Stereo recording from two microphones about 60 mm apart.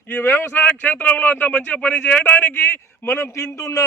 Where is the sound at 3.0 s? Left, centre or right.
Left.